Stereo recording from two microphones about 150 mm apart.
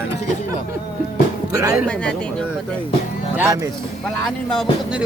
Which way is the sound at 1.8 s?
5° left (ahead or behind).